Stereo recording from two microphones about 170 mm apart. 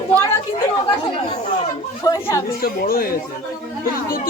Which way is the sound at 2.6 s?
60° left (ahead or behind).